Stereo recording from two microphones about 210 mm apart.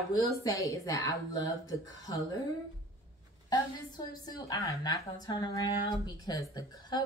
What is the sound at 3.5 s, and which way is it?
A woman's voice, 20° left (ahead or behind).